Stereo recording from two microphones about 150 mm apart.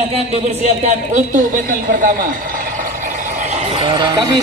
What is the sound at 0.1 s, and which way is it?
Speech, 45° right (ahead or behind).